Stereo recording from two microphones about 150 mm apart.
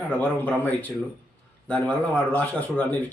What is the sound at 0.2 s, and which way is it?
Speech, 10° left (ahead or behind).